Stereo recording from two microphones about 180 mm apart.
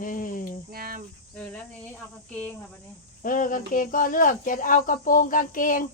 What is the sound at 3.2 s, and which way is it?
Speech, 50° left (ahead or behind).